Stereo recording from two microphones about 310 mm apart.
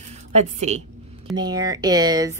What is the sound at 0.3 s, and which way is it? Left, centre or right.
A woman's voice, right.